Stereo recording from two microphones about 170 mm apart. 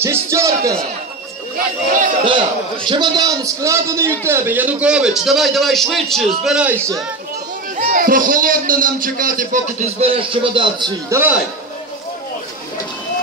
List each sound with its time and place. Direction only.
0.0 s speech: 15° right (ahead or behind)
2.2 s a man's voice: 30° right (ahead or behind); by 6.8 s 5° right (ahead or behind)
7.7 s a man's voice: 55° right (ahead or behind); by 10.9 s 30° right (ahead or behind)
11.1 s speech: 15° right (ahead or behind)